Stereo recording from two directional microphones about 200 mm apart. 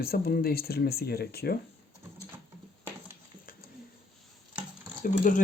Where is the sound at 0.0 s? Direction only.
50° left (ahead or behind).